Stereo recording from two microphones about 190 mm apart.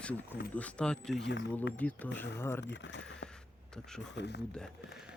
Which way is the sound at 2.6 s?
70° left (ahead or behind).